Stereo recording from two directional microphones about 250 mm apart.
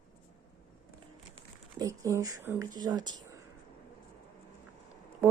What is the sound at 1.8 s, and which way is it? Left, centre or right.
Speech, centre.